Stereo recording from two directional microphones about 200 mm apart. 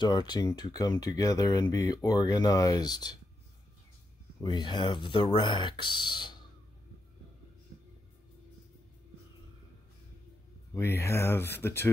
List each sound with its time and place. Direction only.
0.0 s speech: 20° left (ahead or behind)
4.4 s speech: 20° left (ahead or behind)
10.7 s speech: 10° left (ahead or behind)